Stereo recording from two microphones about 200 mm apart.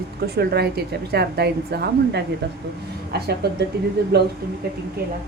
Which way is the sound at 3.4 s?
55° right (ahead or behind).